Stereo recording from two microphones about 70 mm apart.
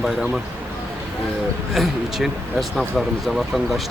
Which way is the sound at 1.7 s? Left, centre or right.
Centre.